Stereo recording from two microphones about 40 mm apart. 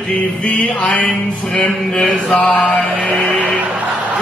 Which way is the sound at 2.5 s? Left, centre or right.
Left.